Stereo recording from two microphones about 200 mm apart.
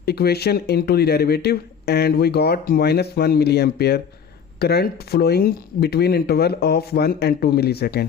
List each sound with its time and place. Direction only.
0.0 s speech: 55° left (ahead or behind)